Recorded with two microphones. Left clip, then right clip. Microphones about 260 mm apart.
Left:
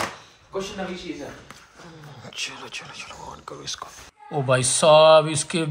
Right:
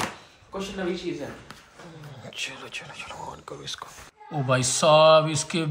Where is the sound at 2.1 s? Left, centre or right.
Centre.